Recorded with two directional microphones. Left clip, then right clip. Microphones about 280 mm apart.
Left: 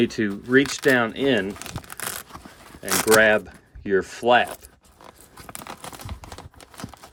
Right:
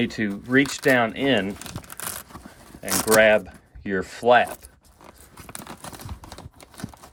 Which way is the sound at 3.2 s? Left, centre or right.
Centre.